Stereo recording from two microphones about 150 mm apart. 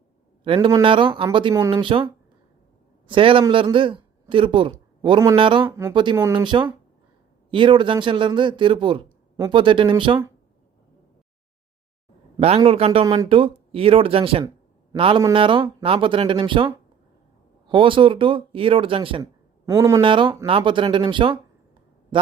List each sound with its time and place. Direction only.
0.4 s speech: 40° right (ahead or behind)
3.1 s a woman's voice: 35° right (ahead or behind)
12.4 s speech: 40° right (ahead or behind)
19.2 s a sound: 20° right (ahead or behind)
20.0 s speech: 35° right (ahead or behind)
22.1 s a sound: 35° right (ahead or behind)